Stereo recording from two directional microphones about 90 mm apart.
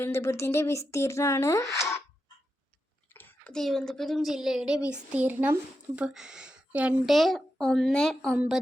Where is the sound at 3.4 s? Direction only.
5° left (ahead or behind); by 6.9 s 15° right (ahead or behind).